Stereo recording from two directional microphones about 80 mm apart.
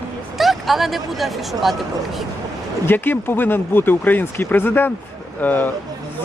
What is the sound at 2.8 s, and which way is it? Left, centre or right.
Speech, left.